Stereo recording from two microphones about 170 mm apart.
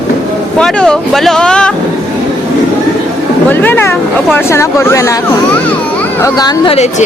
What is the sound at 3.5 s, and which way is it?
A woman's voice, 10° left (ahead or behind).